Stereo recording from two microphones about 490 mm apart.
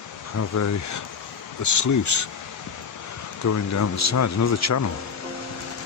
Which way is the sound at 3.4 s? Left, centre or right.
Left.